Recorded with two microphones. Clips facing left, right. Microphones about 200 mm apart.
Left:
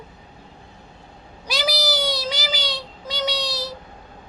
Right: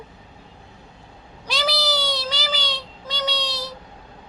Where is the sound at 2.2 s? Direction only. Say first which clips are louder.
Left 1 dB; 10° left (ahead or behind).